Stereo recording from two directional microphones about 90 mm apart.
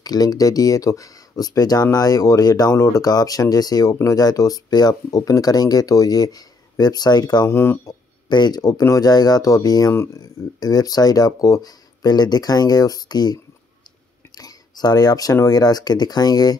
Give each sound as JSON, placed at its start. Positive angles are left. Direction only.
{"t": 0.0, "sound": "speech", "side_deg": 45}
{"t": 7.4, "sound": "speech", "side_deg": 25}
{"t": 8.3, "sound": "speech", "side_deg": 50}